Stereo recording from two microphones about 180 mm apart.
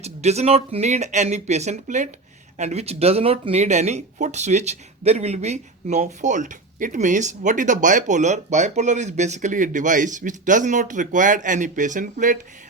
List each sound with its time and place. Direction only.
0.0 s speech: 35° right (ahead or behind)